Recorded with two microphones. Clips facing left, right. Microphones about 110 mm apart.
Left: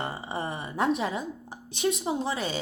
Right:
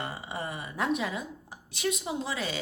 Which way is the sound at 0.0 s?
30° left (ahead or behind).